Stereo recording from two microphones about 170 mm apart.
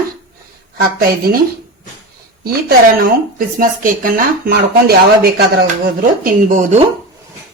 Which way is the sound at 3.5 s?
55° right (ahead or behind).